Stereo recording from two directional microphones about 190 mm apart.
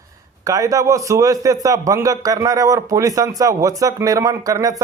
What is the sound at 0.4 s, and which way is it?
A man's voice, 20° right (ahead or behind).